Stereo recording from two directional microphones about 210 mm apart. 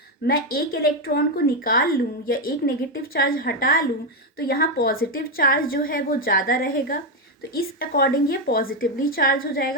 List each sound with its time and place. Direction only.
0.3 s a woman's voice: 45° left (ahead or behind)